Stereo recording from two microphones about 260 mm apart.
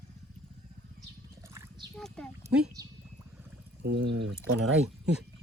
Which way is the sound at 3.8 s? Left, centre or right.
Right.